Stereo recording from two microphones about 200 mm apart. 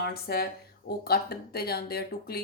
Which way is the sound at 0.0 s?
50° left (ahead or behind).